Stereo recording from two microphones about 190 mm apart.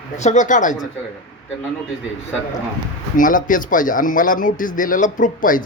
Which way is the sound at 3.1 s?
45° left (ahead or behind).